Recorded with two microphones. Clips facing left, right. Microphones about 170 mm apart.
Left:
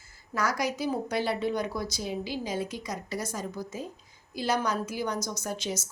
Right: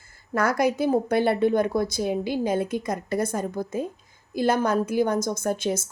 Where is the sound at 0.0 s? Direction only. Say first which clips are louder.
Right 6 dB; 55° right (ahead or behind).